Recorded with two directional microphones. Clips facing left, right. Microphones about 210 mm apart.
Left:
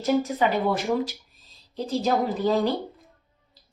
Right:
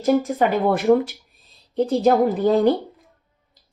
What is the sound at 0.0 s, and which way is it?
Speech, 50° right (ahead or behind).